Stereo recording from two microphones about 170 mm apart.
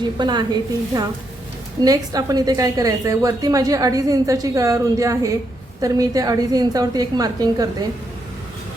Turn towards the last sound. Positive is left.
turn(degrees=-25)  # may be behind; listen again after turning